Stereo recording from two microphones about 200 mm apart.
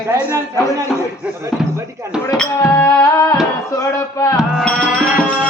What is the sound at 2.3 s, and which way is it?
Music, 10° left (ahead or behind).